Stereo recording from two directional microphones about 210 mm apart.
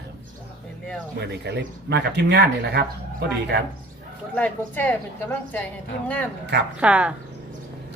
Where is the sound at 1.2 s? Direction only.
50° right (ahead or behind).